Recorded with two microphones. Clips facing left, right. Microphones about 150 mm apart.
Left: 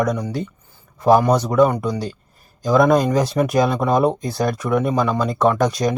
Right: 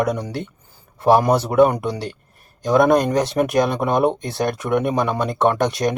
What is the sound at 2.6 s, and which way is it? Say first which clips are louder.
Speech: even; centre (ahead or behind).